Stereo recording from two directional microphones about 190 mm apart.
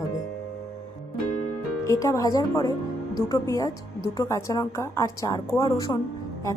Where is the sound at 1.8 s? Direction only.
15° left (ahead or behind).